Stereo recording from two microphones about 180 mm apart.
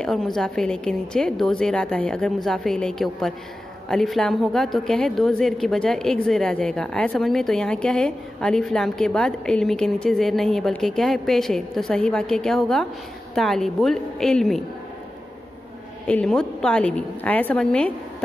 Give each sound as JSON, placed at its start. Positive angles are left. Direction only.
{"t": 0.0, "sound": "a woman's voice", "side_deg": 5}
{"t": 16.1, "sound": "a woman's voice", "side_deg": 5}